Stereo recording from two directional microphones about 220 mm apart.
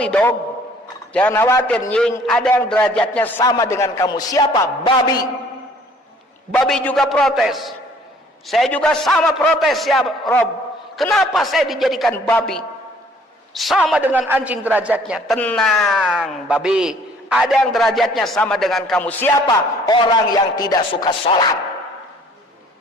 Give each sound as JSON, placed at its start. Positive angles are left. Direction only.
{"t": 0.0, "sound": "a man's voice", "side_deg": 5}
{"t": 6.5, "sound": "a man's voice", "side_deg": 5}
{"t": 19.5, "sound": "a man's voice", "side_deg": 20}